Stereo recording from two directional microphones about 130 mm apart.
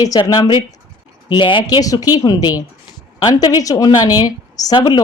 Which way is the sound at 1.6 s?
25° left (ahead or behind).